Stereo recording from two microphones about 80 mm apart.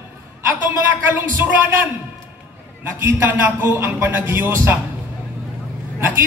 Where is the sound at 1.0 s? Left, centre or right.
Right.